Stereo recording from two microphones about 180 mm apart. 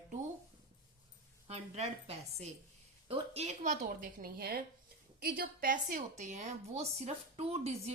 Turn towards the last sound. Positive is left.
turn(degrees=-35)  # may be behind; listen again after turning